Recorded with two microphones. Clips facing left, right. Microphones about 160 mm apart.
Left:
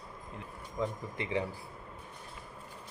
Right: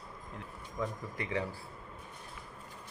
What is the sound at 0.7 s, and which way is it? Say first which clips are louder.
Speech: left 2 dB; 20° left (ahead or behind).